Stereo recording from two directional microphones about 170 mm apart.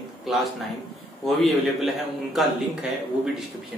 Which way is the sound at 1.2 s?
Centre (ahead or behind).